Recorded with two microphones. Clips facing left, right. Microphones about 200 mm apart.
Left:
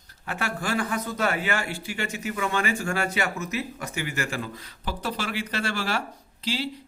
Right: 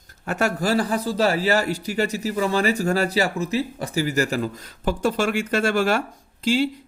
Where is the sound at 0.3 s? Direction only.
45° right (ahead or behind).